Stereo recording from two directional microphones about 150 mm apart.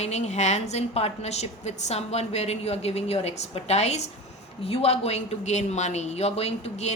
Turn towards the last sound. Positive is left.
turn(degrees=45)  # may be behind; listen again after turning